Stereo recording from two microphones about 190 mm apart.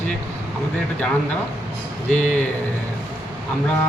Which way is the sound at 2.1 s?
5° left (ahead or behind).